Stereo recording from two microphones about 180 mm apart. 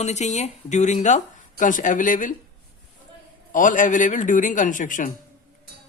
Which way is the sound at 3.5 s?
45° left (ahead or behind).